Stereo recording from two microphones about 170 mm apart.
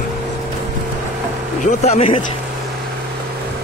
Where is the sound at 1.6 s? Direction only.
40° left (ahead or behind).